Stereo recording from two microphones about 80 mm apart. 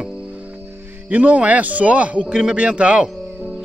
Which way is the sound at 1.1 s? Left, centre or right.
Centre.